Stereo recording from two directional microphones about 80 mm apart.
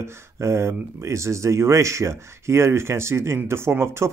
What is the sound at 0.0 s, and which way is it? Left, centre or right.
Speech, right.